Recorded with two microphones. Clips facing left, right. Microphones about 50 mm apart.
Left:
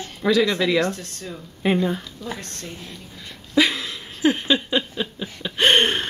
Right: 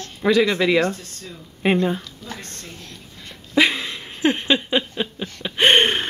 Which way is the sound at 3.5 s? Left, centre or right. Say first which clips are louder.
Right 1 dB; centre.